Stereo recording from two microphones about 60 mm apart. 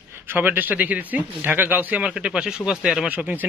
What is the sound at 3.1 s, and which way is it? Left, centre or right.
Speech, right.